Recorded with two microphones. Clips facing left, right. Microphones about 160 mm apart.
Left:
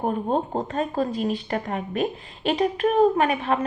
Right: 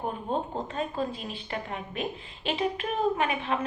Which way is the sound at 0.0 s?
45° left (ahead or behind).